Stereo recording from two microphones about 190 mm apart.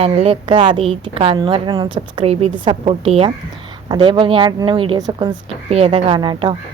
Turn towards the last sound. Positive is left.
turn(degrees=-25)  # may be behind; listen again after turning